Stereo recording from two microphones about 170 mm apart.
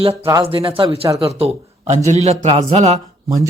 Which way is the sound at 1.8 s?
40° right (ahead or behind).